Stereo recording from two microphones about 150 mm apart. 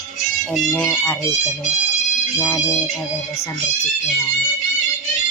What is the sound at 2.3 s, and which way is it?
Speech, 15° left (ahead or behind).